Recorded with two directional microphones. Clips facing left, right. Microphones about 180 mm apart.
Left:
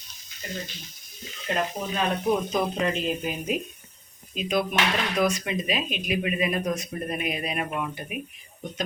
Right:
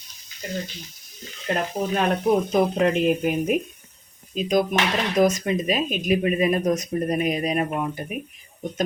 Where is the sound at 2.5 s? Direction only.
60° right (ahead or behind).